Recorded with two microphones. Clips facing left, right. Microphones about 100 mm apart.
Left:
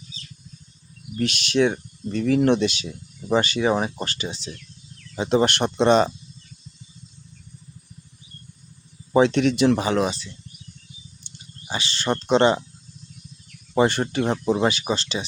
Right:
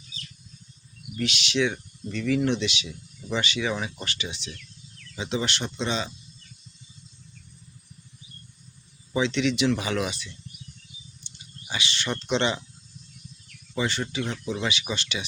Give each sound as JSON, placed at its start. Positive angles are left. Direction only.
{"t": 1.1, "sound": "speech", "side_deg": 45}
{"t": 5.1, "sound": "speech", "side_deg": 45}
{"t": 9.1, "sound": "speech", "side_deg": 50}
{"t": 11.3, "sound": "a sound", "side_deg": 40}
{"t": 11.7, "sound": "speech", "side_deg": 35}
{"t": 13.7, "sound": "speech", "side_deg": 50}
{"t": 14.5, "sound": "speech", "side_deg": 40}